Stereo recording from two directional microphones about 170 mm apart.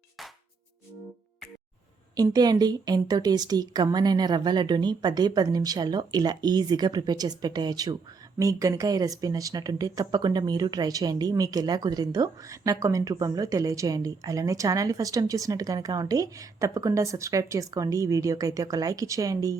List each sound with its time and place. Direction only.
2.1 s speech: 25° right (ahead or behind)